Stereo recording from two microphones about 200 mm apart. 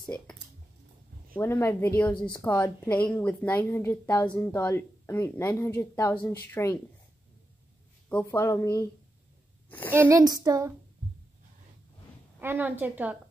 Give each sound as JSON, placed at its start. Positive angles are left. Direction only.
{"t": 1.3, "sound": "a woman's voice", "side_deg": 10}
{"t": 8.1, "sound": "a woman's voice", "side_deg": 10}
{"t": 9.7, "sound": "a sound", "side_deg": 10}
{"t": 9.9, "sound": "a woman's voice", "side_deg": -15}
{"t": 12.4, "sound": "a woman's voice", "side_deg": -10}